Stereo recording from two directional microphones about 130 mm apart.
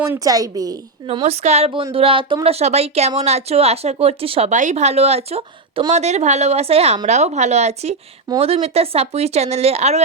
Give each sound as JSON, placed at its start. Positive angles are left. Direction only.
{"t": 0.0, "sound": "a woman's voice", "side_deg": -20}
{"t": 1.2, "sound": "a woman's voice", "side_deg": -55}